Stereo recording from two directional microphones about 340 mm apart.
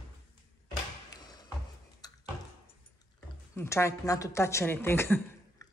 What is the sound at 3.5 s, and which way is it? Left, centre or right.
A woman's voice, centre.